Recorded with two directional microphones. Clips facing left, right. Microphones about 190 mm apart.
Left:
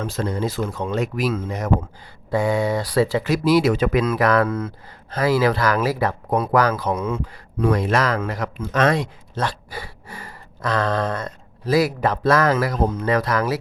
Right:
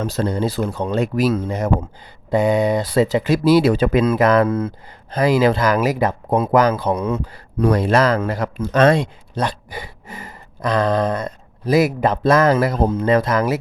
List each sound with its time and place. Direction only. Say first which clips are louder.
0.0 s speech: right 4 dB; 35° right (ahead or behind)
9.3 s speech: right 3 dB; 15° right (ahead or behind)